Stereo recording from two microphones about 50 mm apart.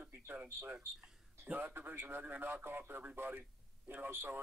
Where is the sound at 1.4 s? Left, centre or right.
Right.